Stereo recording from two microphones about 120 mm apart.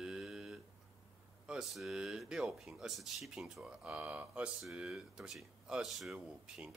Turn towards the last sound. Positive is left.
turn(degrees=-5)  # may be behind; listen again after turning